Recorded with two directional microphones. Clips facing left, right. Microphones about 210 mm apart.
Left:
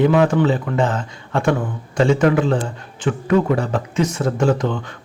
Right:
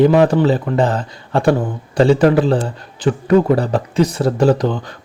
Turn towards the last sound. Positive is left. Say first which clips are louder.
# right 4 dB
turn(degrees=-35)  # may be behind; listen again after turning